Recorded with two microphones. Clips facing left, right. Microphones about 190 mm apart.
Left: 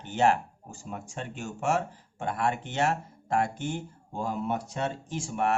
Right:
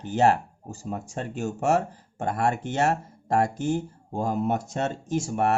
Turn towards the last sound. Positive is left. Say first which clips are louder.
# right 4 dB
turn(degrees=-40)  # may be behind; listen again after turning